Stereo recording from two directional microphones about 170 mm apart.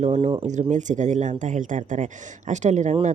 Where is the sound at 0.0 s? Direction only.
45° right (ahead or behind).